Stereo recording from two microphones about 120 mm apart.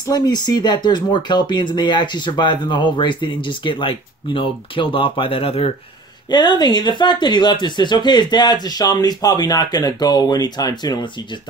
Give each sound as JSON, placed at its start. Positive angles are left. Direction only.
{"t": 0.1, "sound": "speech", "side_deg": 35}
{"t": 6.3, "sound": "speech", "side_deg": 35}